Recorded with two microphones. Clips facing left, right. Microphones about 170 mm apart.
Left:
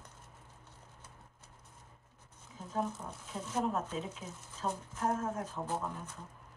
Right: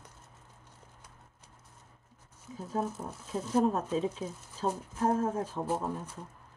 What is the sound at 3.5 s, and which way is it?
Speech, 35° right (ahead or behind).